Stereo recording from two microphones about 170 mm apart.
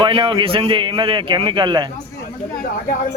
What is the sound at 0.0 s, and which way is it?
A man's voice, 30° right (ahead or behind).